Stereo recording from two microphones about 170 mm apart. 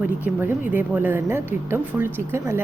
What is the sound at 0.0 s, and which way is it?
A woman's voice, 10° right (ahead or behind).